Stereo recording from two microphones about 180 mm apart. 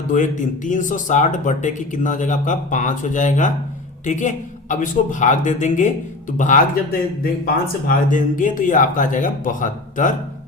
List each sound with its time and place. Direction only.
0.1 s speech: 45° left (ahead or behind)